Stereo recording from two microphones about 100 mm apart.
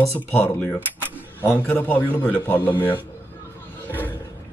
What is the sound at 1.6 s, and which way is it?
A man's voice, 15° left (ahead or behind).